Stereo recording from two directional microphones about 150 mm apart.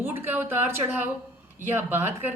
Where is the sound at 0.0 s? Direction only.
15° right (ahead or behind).